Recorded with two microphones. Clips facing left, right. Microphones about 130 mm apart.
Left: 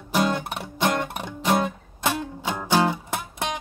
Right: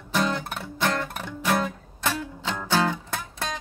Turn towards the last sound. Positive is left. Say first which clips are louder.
# left 3 dB
turn(degrees=15)  # may be behind; listen again after turning